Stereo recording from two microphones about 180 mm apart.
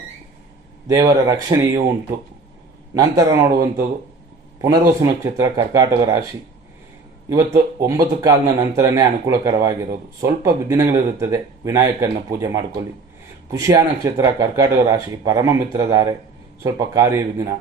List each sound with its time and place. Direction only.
0.9 s speech: 20° right (ahead or behind)
2.9 s speech: 20° right (ahead or behind)
7.3 s speech: 15° right (ahead or behind)